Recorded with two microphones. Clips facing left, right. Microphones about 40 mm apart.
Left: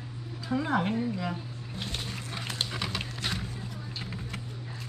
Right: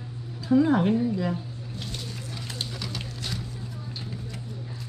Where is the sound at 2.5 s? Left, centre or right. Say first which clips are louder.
Left 3 dB; left.